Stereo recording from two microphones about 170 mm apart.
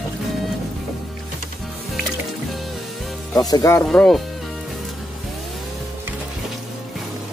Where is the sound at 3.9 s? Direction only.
Centre (ahead or behind).